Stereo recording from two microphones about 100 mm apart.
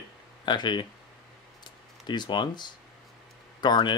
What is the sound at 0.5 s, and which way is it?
Speech, 50° left (ahead or behind).